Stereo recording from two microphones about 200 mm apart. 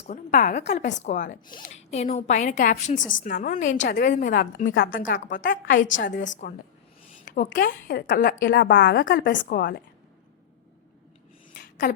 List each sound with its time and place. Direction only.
0.1 s a woman's voice: 40° left (ahead or behind)
8.4 s a woman's voice: 60° left (ahead or behind)
9.2 s speech: 65° left (ahead or behind)
9.5 s a woman's voice: 45° left (ahead or behind)
11.5 s a sound: 40° left (ahead or behind)